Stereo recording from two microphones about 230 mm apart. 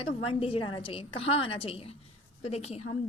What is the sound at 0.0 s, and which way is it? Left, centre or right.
A woman's voice, left.